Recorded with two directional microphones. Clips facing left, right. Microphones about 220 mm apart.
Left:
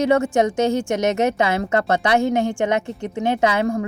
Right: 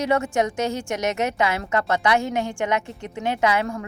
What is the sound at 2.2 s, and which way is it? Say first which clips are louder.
Speech: left 6 dB; 55° left (ahead or behind).